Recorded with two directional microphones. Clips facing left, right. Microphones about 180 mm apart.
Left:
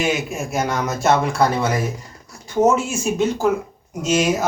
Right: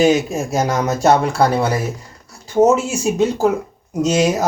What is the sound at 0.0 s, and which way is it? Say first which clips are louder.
Speech: right 7 dB; 35° right (ahead or behind).